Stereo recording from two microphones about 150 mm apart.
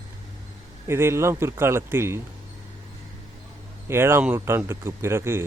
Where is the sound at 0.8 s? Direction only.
15° right (ahead or behind).